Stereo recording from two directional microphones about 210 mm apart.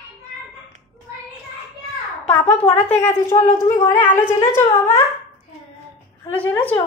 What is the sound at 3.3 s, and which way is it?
Speech, 25° left (ahead or behind).